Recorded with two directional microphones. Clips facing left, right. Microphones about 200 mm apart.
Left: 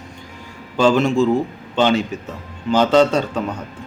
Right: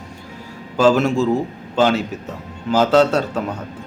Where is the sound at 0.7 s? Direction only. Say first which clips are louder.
Even; 5° right (ahead or behind).